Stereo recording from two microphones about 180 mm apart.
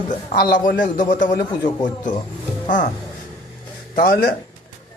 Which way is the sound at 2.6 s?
45° left (ahead or behind).